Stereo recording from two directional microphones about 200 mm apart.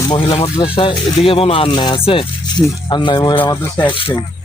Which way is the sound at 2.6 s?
Centre (ahead or behind).